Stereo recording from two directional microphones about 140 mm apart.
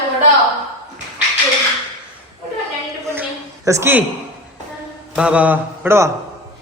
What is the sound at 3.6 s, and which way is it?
Speech, 20° right (ahead or behind).